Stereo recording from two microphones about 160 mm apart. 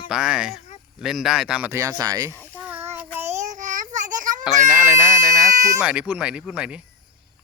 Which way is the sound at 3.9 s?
50° right (ahead or behind).